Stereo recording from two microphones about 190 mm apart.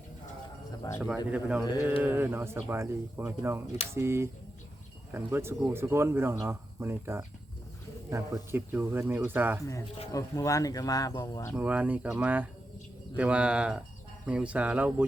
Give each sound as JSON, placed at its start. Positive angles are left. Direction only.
{"t": 0.9, "sound": "speech", "side_deg": -5}
{"t": 10.1, "sound": "speech", "side_deg": 20}
{"t": 11.5, "sound": "speech", "side_deg": -10}